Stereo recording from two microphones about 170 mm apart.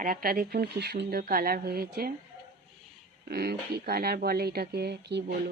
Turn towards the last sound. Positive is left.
turn(degrees=-70)  # may be behind; listen again after turning